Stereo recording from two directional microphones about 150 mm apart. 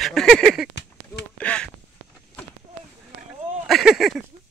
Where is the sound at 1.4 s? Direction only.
10° left (ahead or behind).